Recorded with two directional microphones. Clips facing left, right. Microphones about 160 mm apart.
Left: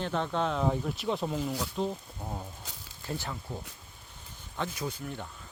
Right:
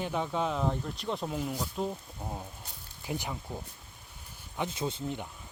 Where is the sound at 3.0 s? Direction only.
15° right (ahead or behind).